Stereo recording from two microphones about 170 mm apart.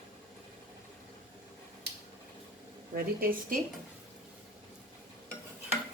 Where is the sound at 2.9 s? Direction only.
60° right (ahead or behind).